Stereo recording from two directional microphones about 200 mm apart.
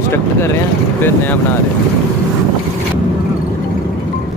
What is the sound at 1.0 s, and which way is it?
Speech, 10° left (ahead or behind).